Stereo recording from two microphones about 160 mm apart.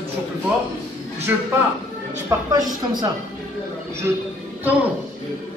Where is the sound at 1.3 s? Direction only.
15° right (ahead or behind).